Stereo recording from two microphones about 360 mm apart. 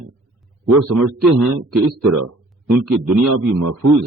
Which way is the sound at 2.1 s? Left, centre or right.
Right.